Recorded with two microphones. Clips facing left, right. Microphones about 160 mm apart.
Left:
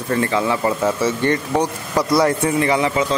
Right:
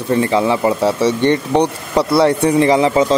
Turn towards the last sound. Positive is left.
turn(degrees=-35)  # may be behind; listen again after turning